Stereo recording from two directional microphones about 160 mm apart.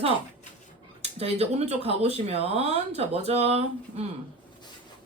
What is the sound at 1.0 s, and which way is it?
Speech, 40° right (ahead or behind).